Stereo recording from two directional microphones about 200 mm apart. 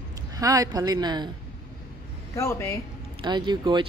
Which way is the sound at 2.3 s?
15° left (ahead or behind).